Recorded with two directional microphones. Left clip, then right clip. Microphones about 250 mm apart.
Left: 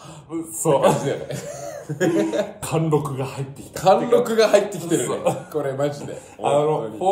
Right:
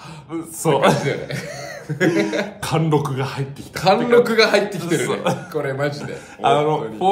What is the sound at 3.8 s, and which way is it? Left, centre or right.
A man's voice, centre.